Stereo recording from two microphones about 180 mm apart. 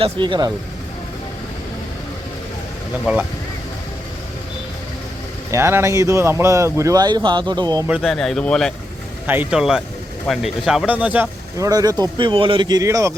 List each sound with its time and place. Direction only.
0.0 s speech: 25° right (ahead or behind)
5.5 s speech: 15° right (ahead or behind)
7.9 s speech: 5° right (ahead or behind)
9.2 s speech: 10° right (ahead or behind)